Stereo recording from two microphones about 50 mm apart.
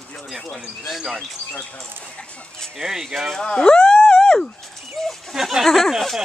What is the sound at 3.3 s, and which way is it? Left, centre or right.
Speech, centre.